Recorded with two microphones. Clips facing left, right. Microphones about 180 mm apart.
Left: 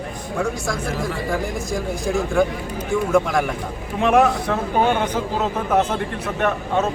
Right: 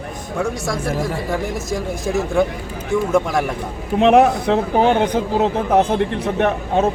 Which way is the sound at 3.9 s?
65° right (ahead or behind).